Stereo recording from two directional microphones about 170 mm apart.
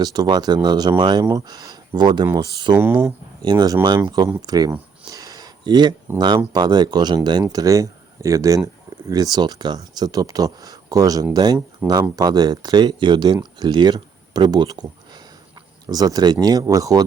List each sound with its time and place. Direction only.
0.0 s speech: 25° right (ahead or behind)
2.7 s speech: 10° right (ahead or behind)
3.4 s speech: 25° right (ahead or behind)
5.0 s a sound: 20° right (ahead or behind)
6.1 s speech: 25° right (ahead or behind)